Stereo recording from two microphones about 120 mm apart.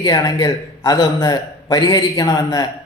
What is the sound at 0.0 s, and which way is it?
A man's voice, 35° left (ahead or behind).